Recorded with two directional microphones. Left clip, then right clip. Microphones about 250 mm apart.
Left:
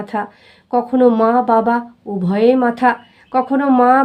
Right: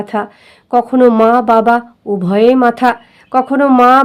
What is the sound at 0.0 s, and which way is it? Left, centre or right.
Speech, right.